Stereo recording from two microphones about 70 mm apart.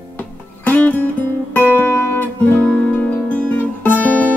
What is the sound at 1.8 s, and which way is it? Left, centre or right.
Music, left.